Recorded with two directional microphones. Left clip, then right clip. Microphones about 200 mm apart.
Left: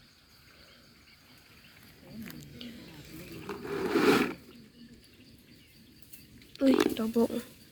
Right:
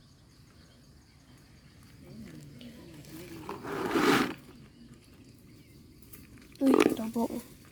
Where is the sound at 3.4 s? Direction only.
25° right (ahead or behind).